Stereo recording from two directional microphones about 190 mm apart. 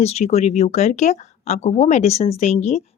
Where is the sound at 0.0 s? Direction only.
35° left (ahead or behind).